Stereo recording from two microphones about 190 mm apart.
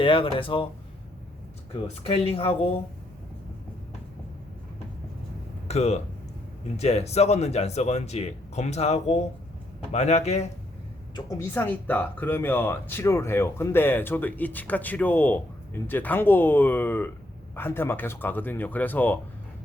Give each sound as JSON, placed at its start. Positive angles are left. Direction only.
{"t": 0.0, "sound": "speech", "side_deg": 25}
{"t": 2.0, "sound": "speech", "side_deg": 30}
{"t": 5.6, "sound": "speech", "side_deg": 35}
{"t": 11.1, "sound": "speech", "side_deg": 15}